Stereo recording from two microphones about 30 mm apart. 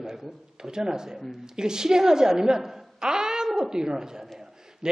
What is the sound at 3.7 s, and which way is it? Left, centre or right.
A man's voice, right.